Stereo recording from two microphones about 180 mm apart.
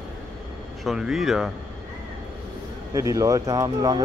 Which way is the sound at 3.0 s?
20° right (ahead or behind).